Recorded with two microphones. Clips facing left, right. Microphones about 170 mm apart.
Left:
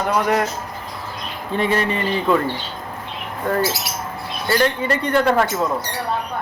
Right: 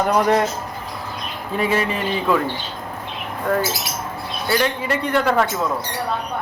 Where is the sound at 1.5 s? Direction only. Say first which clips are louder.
Left 1 dB; 5° right (ahead or behind).